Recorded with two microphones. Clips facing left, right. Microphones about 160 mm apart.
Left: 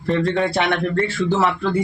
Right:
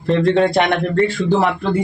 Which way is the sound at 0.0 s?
20° right (ahead or behind).